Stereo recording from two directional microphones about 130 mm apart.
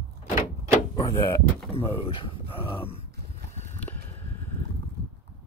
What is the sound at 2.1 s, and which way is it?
Speech, 40° left (ahead or behind).